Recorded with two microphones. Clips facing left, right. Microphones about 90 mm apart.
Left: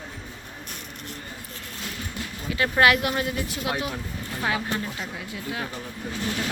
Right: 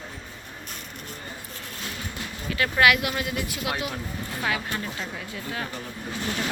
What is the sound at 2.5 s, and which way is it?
Speech, 25° left (ahead or behind).